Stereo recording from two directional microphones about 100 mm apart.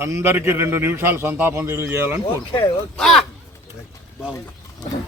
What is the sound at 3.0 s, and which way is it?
Speech, 5° left (ahead or behind).